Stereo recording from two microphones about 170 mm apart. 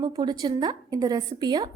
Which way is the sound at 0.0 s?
25° right (ahead or behind).